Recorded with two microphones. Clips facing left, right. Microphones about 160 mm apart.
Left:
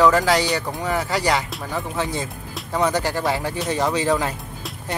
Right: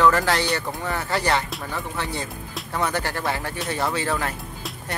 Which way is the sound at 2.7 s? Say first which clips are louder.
Left 5 dB; 15° left (ahead or behind).